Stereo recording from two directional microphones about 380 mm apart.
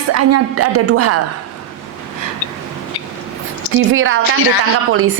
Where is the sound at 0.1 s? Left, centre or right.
Right.